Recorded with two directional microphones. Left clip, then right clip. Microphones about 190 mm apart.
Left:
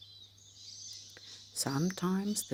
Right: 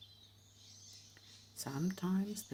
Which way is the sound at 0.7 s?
50° left (ahead or behind).